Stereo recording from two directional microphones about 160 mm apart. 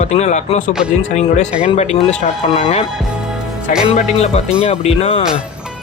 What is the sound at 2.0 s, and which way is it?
Speech, 40° left (ahead or behind).